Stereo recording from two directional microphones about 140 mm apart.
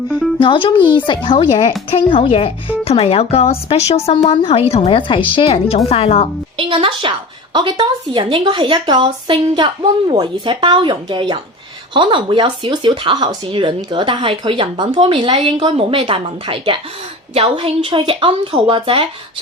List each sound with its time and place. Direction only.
0.3 s speech: 35° left (ahead or behind)
6.6 s a woman's voice: 40° right (ahead or behind)